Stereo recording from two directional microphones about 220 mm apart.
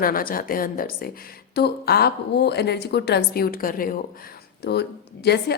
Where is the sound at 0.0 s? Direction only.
40° left (ahead or behind).